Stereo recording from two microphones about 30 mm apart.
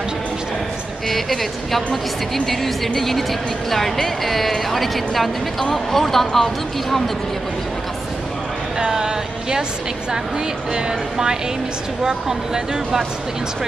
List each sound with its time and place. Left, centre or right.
1.1 s speech: centre
8.9 s speech: centre
10.7 s speech: right